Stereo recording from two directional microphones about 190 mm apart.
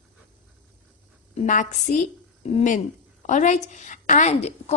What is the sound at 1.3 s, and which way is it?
A woman's voice, 40° left (ahead or behind).